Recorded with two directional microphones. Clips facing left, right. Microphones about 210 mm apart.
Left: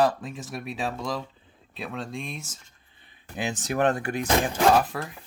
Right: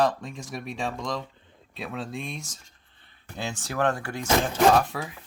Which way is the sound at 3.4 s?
20° left (ahead or behind).